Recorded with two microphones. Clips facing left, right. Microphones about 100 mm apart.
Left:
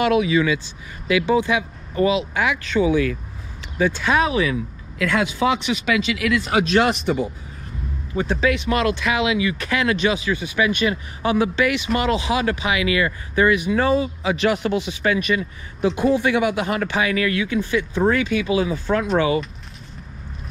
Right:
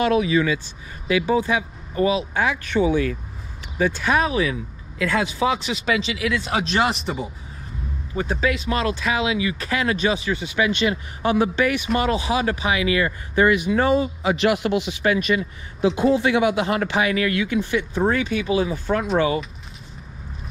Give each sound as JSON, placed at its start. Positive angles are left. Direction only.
{"t": 0.0, "sound": "speech", "side_deg": -35}
{"t": 6.4, "sound": "speech", "side_deg": 0}
{"t": 8.2, "sound": "speech", "side_deg": -35}
{"t": 10.3, "sound": "speech", "side_deg": -25}
{"t": 11.2, "sound": "speech", "side_deg": -40}
{"t": 14.3, "sound": "speech", "side_deg": -20}